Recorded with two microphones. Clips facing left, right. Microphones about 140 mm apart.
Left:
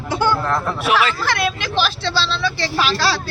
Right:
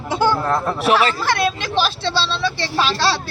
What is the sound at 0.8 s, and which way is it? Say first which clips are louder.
Speech: right 2 dB; 35° right (ahead or behind).